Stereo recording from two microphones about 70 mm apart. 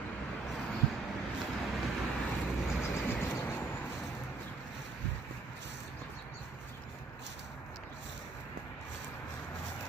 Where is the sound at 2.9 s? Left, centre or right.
Left.